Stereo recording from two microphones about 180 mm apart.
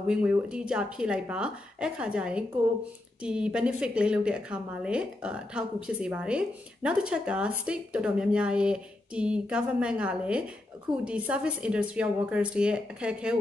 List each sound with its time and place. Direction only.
0.0 s a woman's voice: 5° right (ahead or behind)